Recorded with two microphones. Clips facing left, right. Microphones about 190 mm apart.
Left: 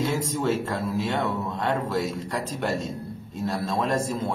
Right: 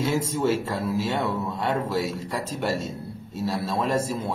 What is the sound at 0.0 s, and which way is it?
Speech, 10° right (ahead or behind).